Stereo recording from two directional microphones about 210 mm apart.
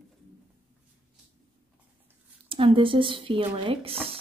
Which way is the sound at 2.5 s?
25° right (ahead or behind).